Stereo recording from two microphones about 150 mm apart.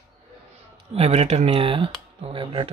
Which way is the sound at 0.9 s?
45° right (ahead or behind).